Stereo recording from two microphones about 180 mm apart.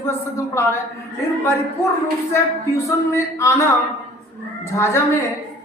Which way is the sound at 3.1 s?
15° left (ahead or behind).